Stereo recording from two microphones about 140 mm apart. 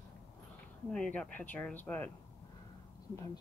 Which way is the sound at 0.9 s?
5° left (ahead or behind).